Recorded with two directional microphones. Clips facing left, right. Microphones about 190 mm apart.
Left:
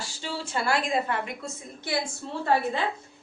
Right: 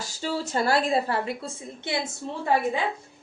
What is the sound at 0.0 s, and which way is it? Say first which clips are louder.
A woman's voice: right 5 dB; 40° right (ahead or behind).